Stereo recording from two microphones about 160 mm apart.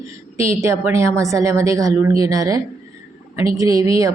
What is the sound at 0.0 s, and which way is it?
A woman's voice, 20° right (ahead or behind).